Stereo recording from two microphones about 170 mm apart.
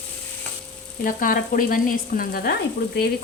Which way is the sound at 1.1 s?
55° left (ahead or behind).